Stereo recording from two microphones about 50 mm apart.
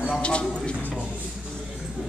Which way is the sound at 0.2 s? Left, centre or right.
Left.